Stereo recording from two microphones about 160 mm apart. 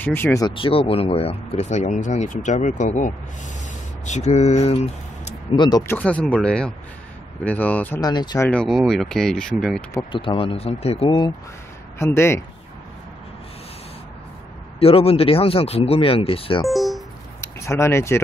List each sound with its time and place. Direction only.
0.0 s speech: 15° left (ahead or behind)
0.5 s speech: 35° left (ahead or behind)
5.6 s speech: 25° left (ahead or behind)
5.9 s speech: 10° left (ahead or behind)
8.0 s speech: 25° left (ahead or behind)
8.4 s speech: 10° left (ahead or behind)
8.6 s speech: centre (ahead or behind)
10.1 s speech: 35° left (ahead or behind)
12.0 s speech: 15° left (ahead or behind)
14.8 s speech: 35° left (ahead or behind)
16.6 s music: centre (ahead or behind)
17.6 s speech: 15° left (ahead or behind)